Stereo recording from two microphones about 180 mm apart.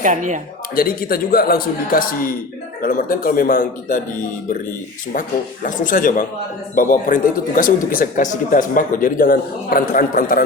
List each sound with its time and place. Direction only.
0.0 s speech: 45° right (ahead or behind)
0.8 s a man's voice: 55° left (ahead or behind)
5.6 s a man's voice: 45° left (ahead or behind)